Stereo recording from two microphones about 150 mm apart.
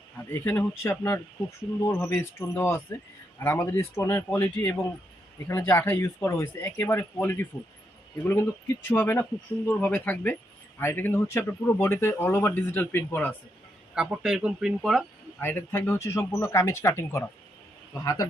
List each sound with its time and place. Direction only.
0.3 s a man's voice: 15° left (ahead or behind)
13.9 s speech: 5° right (ahead or behind)
15.4 s speech: 15° left (ahead or behind)